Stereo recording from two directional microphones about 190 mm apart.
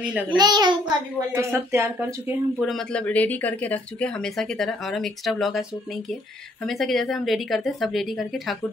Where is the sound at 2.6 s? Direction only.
Centre (ahead or behind).